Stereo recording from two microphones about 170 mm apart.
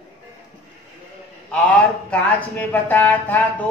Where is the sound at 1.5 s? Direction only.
10° left (ahead or behind).